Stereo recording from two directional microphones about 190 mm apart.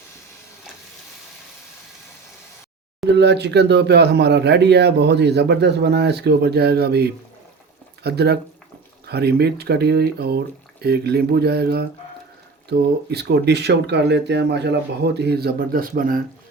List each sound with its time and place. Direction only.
3.1 s speech: 60° right (ahead or behind); by 16.2 s 45° right (ahead or behind)